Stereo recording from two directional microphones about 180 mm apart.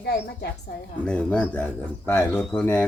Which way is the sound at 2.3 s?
5° left (ahead or behind).